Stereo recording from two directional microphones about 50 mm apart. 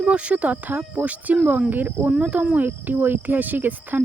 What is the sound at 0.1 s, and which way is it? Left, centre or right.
Speech, right.